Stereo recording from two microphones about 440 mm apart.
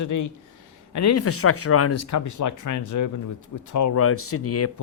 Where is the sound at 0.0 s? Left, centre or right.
Left.